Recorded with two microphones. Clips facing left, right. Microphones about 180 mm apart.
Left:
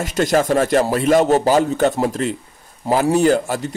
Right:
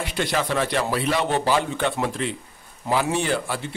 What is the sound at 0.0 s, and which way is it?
A man's voice, 45° left (ahead or behind).